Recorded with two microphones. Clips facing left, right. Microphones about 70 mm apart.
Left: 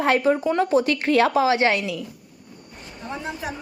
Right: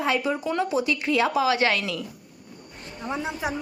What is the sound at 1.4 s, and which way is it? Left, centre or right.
Speech, left.